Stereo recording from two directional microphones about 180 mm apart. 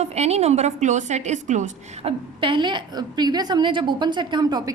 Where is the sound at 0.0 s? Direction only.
35° right (ahead or behind).